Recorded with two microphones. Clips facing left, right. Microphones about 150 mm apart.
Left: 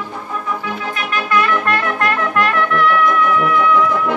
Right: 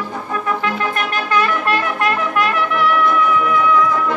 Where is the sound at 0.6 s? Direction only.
80° right.